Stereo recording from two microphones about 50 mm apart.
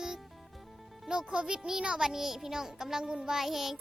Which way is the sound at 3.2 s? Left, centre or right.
Centre.